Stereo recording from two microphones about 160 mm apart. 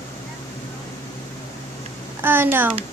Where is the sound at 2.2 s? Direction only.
15° right (ahead or behind).